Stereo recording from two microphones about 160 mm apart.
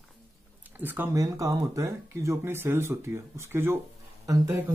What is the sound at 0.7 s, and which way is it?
Speech, 10° right (ahead or behind).